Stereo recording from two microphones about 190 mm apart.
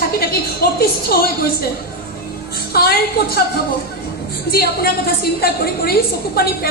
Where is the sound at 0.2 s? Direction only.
55° left (ahead or behind).